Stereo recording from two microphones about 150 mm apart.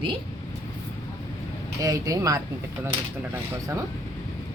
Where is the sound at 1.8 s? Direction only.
20° right (ahead or behind).